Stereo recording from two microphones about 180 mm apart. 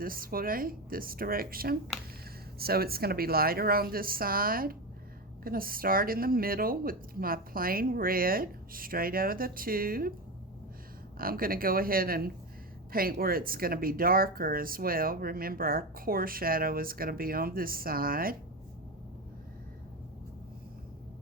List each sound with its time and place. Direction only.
0.0 s speech: 55° right (ahead or behind)
11.2 s speech: 55° right (ahead or behind)